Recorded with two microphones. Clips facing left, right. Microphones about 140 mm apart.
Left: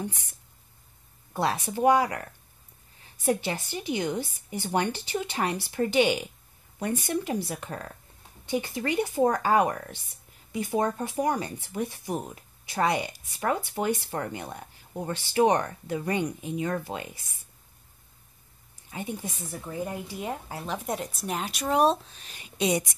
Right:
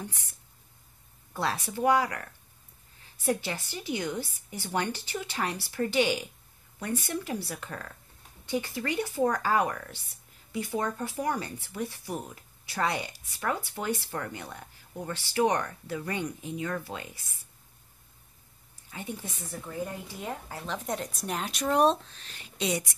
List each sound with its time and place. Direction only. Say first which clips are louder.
1.3 s speech: left 4 dB; 20° left (ahead or behind)
3.3 s speech: left 3 dB; 20° left (ahead or behind)
18.9 s speech: left 4 dB; 20° left (ahead or behind)